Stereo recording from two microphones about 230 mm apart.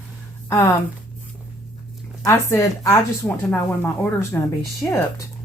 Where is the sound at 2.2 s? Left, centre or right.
Centre.